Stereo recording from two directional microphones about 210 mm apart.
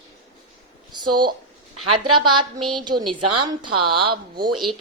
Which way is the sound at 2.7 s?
20° right (ahead or behind).